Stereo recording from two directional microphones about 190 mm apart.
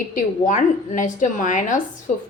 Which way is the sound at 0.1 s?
45° left (ahead or behind).